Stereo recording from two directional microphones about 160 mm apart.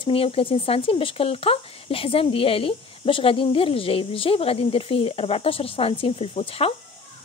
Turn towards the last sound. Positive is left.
turn(degrees=35)  # may be behind; listen again after turning